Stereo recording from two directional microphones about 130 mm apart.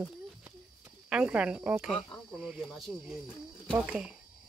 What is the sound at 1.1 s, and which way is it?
Speech, 5° right (ahead or behind).